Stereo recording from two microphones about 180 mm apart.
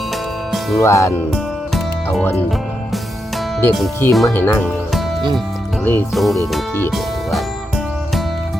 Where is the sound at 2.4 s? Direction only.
Centre (ahead or behind).